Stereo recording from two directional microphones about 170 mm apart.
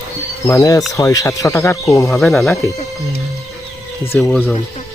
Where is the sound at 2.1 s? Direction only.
Centre (ahead or behind).